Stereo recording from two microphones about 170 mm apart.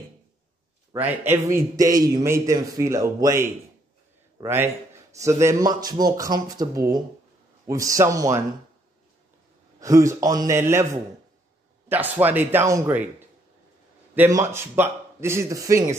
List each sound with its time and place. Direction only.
0.9 s a man's voice: 10° right (ahead or behind)
9.8 s a man's voice: 20° right (ahead or behind)
14.1 s a man's voice: 15° right (ahead or behind)